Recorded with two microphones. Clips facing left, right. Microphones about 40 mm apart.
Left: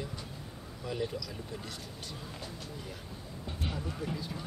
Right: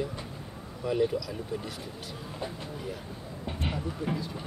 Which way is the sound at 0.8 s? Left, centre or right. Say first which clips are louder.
Right 9 dB; centre.